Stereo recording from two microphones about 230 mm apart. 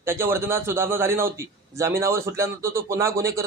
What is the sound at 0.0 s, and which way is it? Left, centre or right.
A man's voice, centre.